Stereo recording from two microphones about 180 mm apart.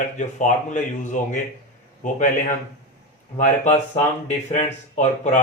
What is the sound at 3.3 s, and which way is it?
A man's voice, 45° left (ahead or behind).